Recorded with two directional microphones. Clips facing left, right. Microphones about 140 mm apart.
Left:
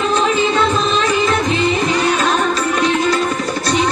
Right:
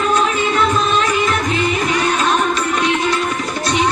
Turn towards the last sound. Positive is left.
turn(degrees=35)  # may be behind; listen again after turning